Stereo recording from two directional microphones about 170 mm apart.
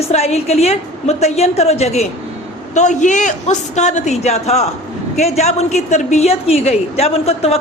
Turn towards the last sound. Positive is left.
turn(degrees=35)  # may be behind; listen again after turning